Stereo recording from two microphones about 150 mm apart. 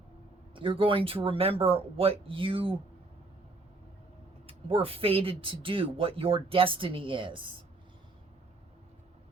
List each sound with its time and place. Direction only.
0.5 s speech: 35° right (ahead or behind)
4.4 s speech: 40° right (ahead or behind)